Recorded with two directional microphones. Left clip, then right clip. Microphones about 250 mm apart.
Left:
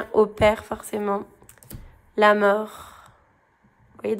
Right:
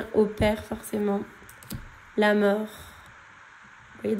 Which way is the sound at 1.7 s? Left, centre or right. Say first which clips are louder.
Right 7 dB; centre.